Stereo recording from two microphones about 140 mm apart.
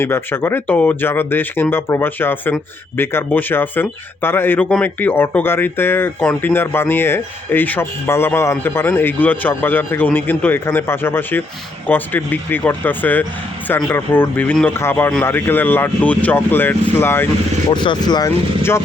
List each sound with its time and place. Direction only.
0.0 s speech: 15° left (ahead or behind)
17.7 s speech: 35° left (ahead or behind)
18.3 s speech: 15° left (ahead or behind)